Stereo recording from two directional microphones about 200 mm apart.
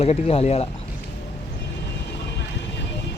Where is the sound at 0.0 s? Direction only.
30° left (ahead or behind).